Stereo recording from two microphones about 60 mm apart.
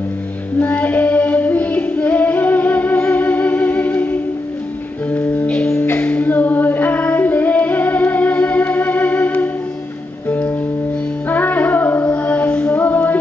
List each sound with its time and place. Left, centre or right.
0.6 s female singing: left
5.1 s music: left
5.5 s music: left
11.2 s female singing: left